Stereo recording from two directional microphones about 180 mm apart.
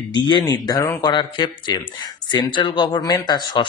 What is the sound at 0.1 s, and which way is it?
Speech, 25° left (ahead or behind).